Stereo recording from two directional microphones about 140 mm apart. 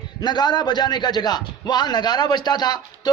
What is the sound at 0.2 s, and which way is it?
A man's voice, 30° left (ahead or behind).